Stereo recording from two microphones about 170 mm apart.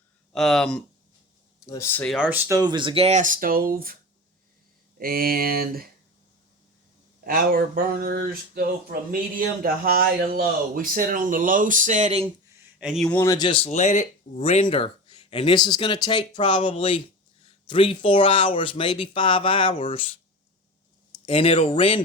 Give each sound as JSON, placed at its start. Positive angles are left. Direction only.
{"t": 0.3, "sound": "speech", "side_deg": 0}
{"t": 1.6, "sound": "speech", "side_deg": 20}
{"t": 2.1, "sound": "speech", "side_deg": -10}
{"t": 2.6, "sound": "speech", "side_deg": -25}
{"t": 4.9, "sound": "speech", "side_deg": -60}
{"t": 7.3, "sound": "speech", "side_deg": -60}
{"t": 12.8, "sound": "speech", "side_deg": 0}
{"t": 13.1, "sound": "speech", "side_deg": 20}
{"t": 13.7, "sound": "speech", "side_deg": 40}
{"t": 21.2, "sound": "speech", "side_deg": 35}